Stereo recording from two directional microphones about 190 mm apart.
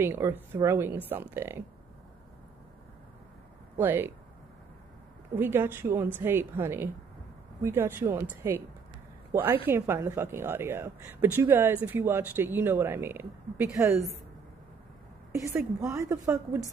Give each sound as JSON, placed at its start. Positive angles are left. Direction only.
{"t": 0.0, "sound": "a woman's voice", "side_deg": -10}
{"t": 3.7, "sound": "a woman's voice", "side_deg": -10}
{"t": 5.3, "sound": "a woman's voice", "side_deg": -10}
{"t": 15.3, "sound": "a woman's voice", "side_deg": -15}